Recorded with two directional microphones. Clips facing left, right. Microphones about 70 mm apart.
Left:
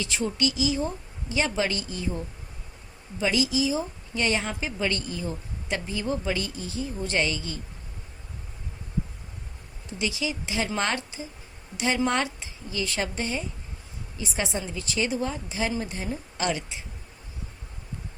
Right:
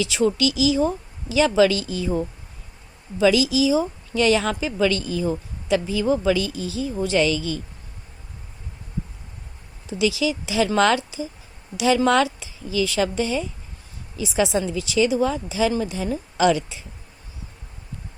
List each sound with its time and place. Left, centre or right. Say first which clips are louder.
0.0 s a woman's voice: right 7 dB; right
10.0 s a woman's voice: right 8 dB; right